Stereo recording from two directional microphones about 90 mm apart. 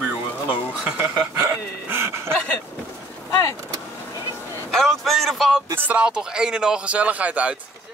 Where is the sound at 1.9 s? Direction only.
30° right (ahead or behind).